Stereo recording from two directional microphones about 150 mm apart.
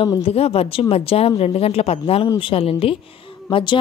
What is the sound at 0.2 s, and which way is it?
Speech, 40° left (ahead or behind).